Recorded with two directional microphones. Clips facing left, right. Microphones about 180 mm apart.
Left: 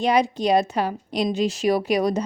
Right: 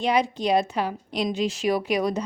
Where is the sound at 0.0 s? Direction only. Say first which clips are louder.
Left 3 dB; 40° left (ahead or behind).